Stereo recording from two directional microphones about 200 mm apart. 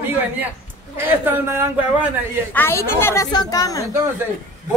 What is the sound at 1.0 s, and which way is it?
Speech, 10° right (ahead or behind).